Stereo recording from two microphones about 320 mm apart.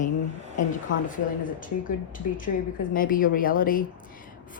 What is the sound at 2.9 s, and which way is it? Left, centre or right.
Speech, left.